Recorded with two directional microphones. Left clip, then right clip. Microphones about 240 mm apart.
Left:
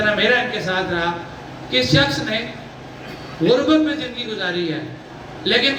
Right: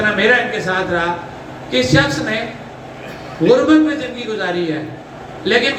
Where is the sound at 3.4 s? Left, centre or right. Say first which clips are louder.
Right 4 dB; centre.